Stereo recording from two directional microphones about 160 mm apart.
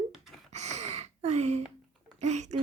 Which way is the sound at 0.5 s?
45° right (ahead or behind).